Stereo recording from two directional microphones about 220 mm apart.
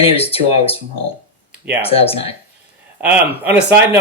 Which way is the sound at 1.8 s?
25° left (ahead or behind).